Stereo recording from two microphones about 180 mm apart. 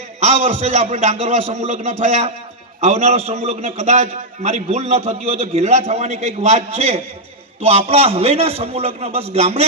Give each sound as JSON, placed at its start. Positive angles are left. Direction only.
{"t": 0.2, "sound": "a man's voice", "side_deg": -35}